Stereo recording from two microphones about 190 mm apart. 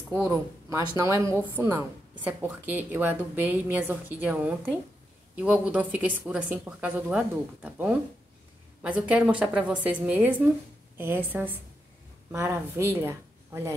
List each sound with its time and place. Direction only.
0.1 s a woman's voice: 15° right (ahead or behind)